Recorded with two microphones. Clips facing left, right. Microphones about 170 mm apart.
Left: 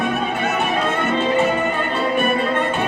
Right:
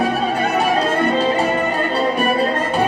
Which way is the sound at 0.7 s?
35° right (ahead or behind).